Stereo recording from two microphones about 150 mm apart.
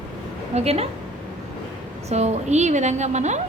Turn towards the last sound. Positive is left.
turn(degrees=-50)  # may be behind; listen again after turning